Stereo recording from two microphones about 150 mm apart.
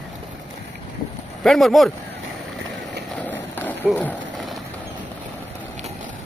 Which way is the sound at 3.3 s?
10° left (ahead or behind).